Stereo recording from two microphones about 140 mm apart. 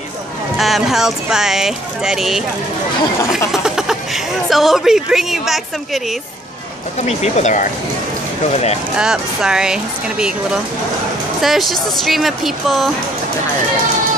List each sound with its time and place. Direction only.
0.6 s speech: centre (ahead or behind)
7.1 s speech: 55° left (ahead or behind)
8.9 s speech: 5° right (ahead or behind)